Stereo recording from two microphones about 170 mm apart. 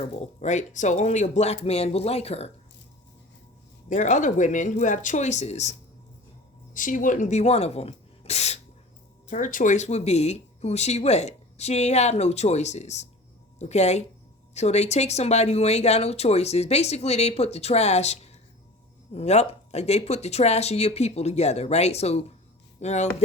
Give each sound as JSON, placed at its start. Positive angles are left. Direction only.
{"t": 0.0, "sound": "speech", "side_deg": 40}
{"t": 3.8, "sound": "speech", "side_deg": 45}
{"t": 6.7, "sound": "speech", "side_deg": 50}
{"t": 9.3, "sound": "speech", "side_deg": 50}